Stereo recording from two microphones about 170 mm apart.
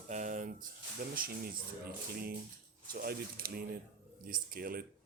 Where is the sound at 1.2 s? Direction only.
60° right (ahead or behind).